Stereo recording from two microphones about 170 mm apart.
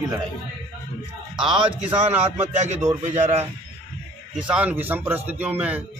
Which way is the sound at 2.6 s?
40° right (ahead or behind).